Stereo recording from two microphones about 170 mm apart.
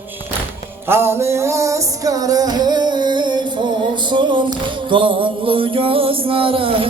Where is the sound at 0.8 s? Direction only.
15° right (ahead or behind).